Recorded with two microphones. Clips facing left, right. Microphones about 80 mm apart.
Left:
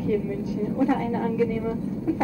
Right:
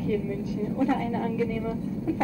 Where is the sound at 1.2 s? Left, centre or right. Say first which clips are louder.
Left 3 dB; left.